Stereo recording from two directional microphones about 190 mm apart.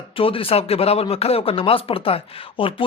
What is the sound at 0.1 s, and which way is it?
Speech, 30° left (ahead or behind).